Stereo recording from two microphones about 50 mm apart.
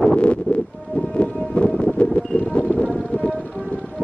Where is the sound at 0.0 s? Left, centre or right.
Left.